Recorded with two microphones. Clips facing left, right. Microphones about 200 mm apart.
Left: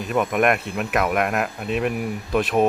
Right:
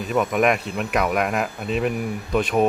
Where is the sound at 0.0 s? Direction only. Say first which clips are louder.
Even; centre (ahead or behind).